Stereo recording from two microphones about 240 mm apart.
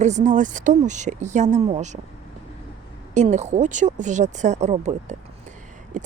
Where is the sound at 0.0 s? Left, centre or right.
Right.